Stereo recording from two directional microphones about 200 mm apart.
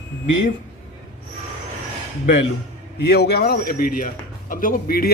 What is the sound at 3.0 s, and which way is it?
Speech, 55° left (ahead or behind).